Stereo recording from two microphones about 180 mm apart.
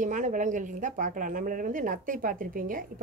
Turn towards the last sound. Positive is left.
turn(degrees=-50)  # may be behind; listen again after turning